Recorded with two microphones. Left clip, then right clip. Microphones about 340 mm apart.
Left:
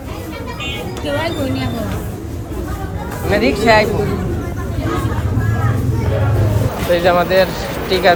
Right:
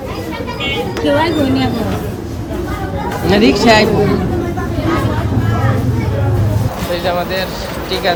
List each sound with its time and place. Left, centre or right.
1.0 s speech: centre
3.2 s speech: centre
6.9 s speech: centre